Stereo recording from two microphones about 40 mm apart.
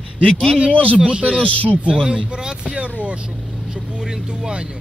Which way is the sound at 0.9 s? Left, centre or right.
Right.